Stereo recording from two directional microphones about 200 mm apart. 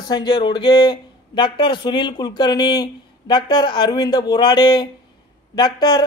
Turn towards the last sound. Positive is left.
turn(degrees=20)  # may be behind; listen again after turning